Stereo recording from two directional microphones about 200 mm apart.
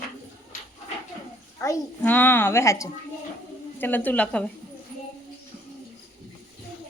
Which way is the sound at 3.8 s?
10° left (ahead or behind).